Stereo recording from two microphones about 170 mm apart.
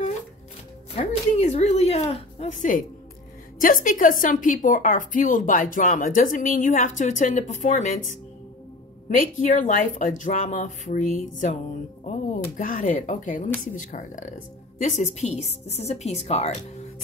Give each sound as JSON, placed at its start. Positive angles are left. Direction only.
{"t": 0.9, "sound": "a woman's voice", "side_deg": 40}